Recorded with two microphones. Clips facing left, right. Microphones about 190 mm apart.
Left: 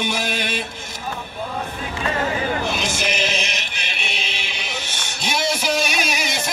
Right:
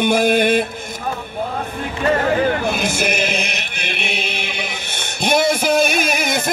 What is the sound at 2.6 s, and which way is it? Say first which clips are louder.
Chant: right 4 dB; 55° right (ahead or behind).